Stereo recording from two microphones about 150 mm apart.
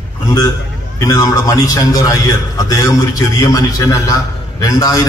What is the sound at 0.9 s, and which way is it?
A man's voice, 20° left (ahead or behind).